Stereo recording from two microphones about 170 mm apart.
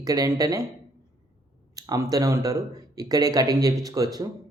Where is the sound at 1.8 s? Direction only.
20° right (ahead or behind).